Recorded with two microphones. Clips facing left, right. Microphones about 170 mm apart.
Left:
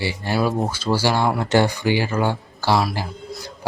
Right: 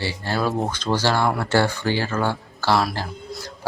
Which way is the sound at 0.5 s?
5° left (ahead or behind).